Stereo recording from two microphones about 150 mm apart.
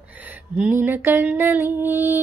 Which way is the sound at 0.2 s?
10° right (ahead or behind).